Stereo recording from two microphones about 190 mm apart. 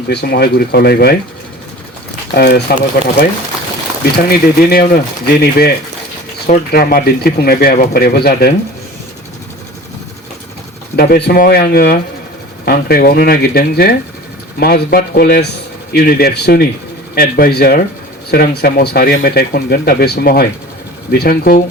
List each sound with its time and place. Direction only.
0.1 s speech: 60° left (ahead or behind)
2.3 s speech: 55° left (ahead or behind)
4.3 s speech: 55° left (ahead or behind)
10.9 s speech: 50° left (ahead or behind)